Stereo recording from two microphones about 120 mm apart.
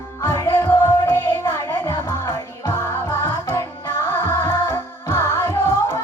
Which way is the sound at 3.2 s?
20° left (ahead or behind).